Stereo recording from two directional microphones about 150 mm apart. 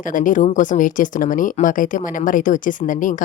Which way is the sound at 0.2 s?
60° left (ahead or behind).